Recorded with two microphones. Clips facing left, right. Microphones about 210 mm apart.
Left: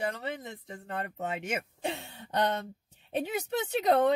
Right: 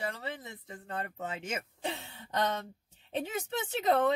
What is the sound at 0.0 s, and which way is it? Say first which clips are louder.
Speech: left 4 dB; 20° left (ahead or behind).